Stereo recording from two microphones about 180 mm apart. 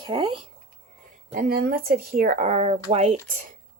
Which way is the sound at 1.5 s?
60° right (ahead or behind).